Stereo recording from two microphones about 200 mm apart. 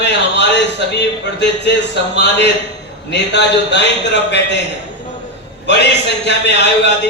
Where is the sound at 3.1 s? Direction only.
60° left (ahead or behind).